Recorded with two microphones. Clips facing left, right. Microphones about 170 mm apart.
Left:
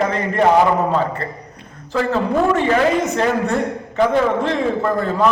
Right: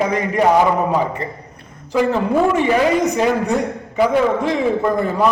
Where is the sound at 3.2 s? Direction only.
10° right (ahead or behind).